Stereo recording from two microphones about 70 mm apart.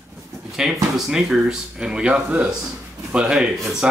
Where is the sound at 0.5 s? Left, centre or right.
Centre.